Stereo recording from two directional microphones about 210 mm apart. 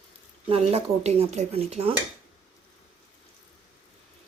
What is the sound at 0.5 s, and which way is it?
Speech, 30° right (ahead or behind).